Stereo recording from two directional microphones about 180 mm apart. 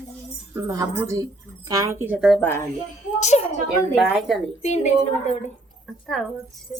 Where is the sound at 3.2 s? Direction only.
35° left (ahead or behind).